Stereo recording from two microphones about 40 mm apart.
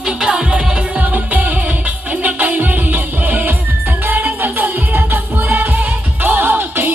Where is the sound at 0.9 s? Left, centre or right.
Right.